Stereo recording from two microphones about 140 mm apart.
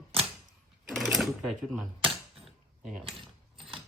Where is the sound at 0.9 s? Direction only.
Centre (ahead or behind).